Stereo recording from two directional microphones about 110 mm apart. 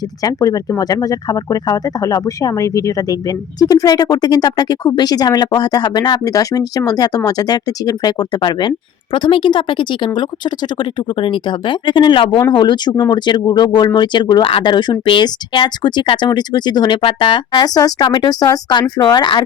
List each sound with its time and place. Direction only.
0.2 s speech: 30° left (ahead or behind); by 12.4 s 55° left (ahead or behind)
12.5 s speech: 40° left (ahead or behind)